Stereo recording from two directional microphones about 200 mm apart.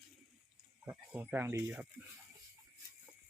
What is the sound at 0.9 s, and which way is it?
Speech, 10° right (ahead or behind).